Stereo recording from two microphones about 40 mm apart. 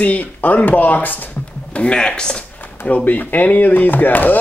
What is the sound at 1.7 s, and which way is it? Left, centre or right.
Speech, left.